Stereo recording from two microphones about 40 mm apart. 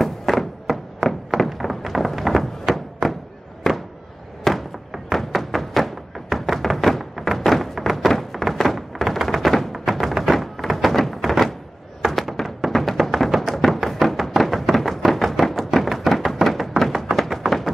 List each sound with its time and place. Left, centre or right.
0.0 s thunk: centre
3.6 s a sound: centre
4.9 s music: centre
6.7 s thunk: centre
12.0 s music: centre
17.5 s tap: centre